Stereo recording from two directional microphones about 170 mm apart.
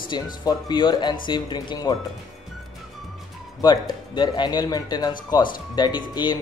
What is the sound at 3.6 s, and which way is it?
Speech, 25° left (ahead or behind).